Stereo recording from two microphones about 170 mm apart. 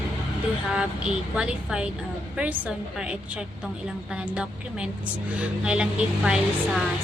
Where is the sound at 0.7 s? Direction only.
5° right (ahead or behind).